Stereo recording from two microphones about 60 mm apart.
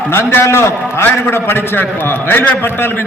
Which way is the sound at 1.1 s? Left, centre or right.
Left.